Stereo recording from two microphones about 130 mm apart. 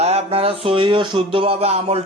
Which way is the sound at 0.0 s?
50° right (ahead or behind).